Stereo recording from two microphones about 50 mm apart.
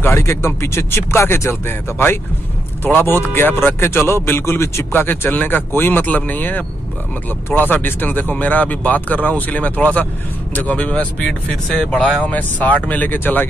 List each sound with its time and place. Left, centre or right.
0.2 s a man's voice: left
4.9 s a man's voice: left
11.8 s speech: centre
12.3 s speech: left